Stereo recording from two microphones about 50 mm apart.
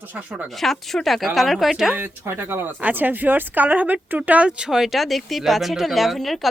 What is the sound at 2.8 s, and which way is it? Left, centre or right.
Speech, right.